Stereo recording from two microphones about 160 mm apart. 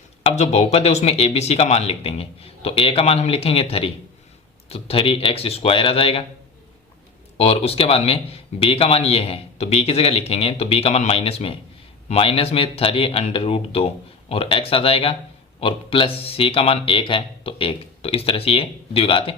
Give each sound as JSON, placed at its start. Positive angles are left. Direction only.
{"t": 0.2, "sound": "speech", "side_deg": 40}
{"t": 7.3, "sound": "speech", "side_deg": 35}